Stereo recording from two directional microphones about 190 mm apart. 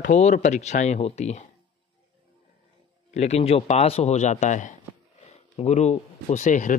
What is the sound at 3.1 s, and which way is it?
Speech, 35° left (ahead or behind).